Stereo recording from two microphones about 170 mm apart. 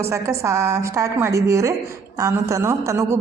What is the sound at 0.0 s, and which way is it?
A man's voice, 15° right (ahead or behind).